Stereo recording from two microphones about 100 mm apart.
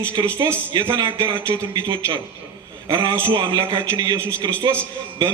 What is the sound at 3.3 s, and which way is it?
A man's voice, 45° right (ahead or behind).